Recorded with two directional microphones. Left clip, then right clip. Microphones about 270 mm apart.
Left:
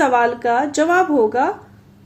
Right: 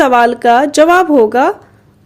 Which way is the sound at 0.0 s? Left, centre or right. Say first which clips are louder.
Right 7 dB; right.